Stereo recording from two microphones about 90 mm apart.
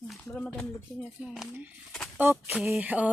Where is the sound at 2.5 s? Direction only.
10° right (ahead or behind).